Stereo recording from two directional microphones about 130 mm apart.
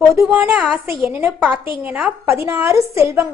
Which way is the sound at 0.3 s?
10° right (ahead or behind).